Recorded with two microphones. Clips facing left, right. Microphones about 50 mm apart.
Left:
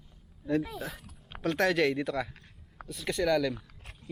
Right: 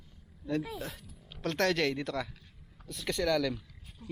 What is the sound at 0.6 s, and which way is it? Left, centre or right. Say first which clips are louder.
Speech: left 2 dB; centre.